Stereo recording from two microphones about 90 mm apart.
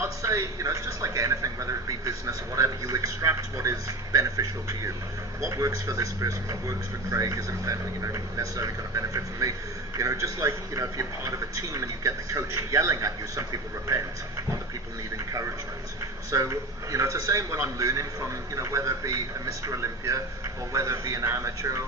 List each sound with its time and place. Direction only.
0.0 s a man's voice: 35° right (ahead or behind)
16.3 s a man's voice: 35° right (ahead or behind)